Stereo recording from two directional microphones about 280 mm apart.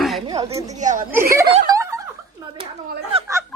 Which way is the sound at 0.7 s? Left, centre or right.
Right.